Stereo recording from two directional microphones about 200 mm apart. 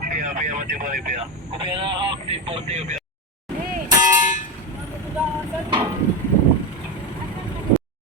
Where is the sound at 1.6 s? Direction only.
25° right (ahead or behind).